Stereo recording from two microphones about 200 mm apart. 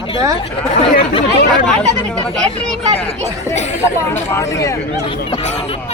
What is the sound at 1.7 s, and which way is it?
Speech, 5° left (ahead or behind).